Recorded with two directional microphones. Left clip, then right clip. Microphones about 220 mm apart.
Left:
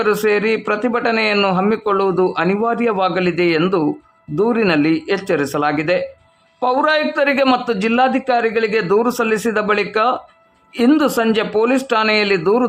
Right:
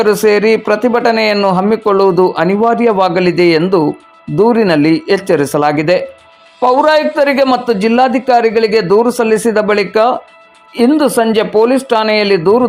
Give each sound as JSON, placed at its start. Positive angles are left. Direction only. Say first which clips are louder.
{"t": 0.0, "sound": "a man's voice", "louder": "right 6 dB", "side_deg": -15}